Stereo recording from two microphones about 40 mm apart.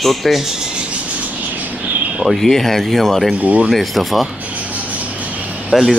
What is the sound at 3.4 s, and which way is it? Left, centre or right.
Speech, right.